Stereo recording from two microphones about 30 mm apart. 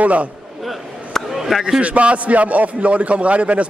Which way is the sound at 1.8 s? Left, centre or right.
Right.